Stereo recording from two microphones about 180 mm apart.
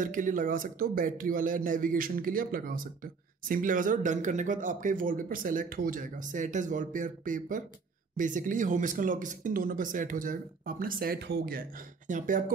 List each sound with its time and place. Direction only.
0.0 s a man's voice: 45° right (ahead or behind)
12.1 s a man's voice: 45° right (ahead or behind)